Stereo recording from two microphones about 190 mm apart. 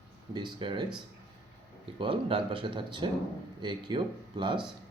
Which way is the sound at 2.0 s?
25° right (ahead or behind).